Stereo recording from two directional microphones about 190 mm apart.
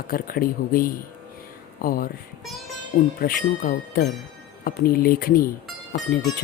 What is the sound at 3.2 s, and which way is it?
Speech, 50° left (ahead or behind).